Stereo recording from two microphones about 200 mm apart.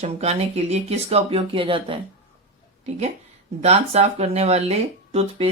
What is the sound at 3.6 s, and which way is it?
Speech, 35° right (ahead or behind).